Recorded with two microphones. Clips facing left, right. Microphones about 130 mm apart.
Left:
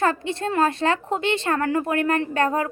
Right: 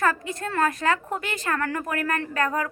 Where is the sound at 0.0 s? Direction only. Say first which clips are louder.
Left 3 dB; 25° left (ahead or behind).